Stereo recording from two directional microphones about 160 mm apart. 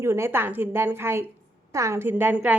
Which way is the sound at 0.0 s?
15° right (ahead or behind).